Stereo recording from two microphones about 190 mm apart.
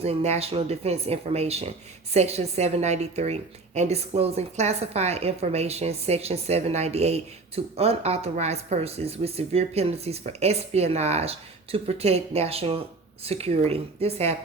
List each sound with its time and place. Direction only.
0.0 s a woman's voice: 35° right (ahead or behind)